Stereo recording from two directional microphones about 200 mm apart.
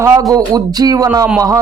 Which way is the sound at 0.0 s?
15° right (ahead or behind).